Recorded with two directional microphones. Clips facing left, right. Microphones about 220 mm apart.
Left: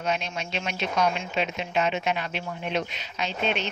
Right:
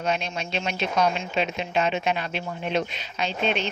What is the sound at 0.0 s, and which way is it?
A woman's voice, 30° right (ahead or behind).